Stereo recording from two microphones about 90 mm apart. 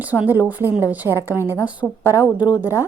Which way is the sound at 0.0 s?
20° right (ahead or behind).